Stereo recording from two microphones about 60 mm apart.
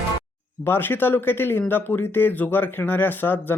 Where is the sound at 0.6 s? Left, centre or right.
Left.